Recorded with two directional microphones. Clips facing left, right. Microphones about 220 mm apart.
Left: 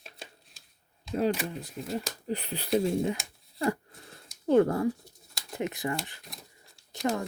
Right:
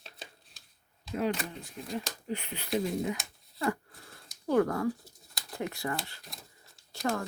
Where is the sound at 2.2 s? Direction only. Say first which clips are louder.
Left 4 dB; 35° left (ahead or behind).